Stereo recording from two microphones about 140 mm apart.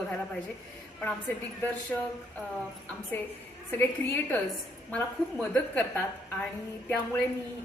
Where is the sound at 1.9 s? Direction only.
15° left (ahead or behind).